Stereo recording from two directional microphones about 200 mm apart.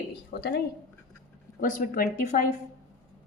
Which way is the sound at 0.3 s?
50° left (ahead or behind).